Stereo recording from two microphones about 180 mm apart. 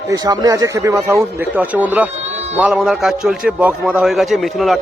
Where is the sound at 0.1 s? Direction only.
20° right (ahead or behind).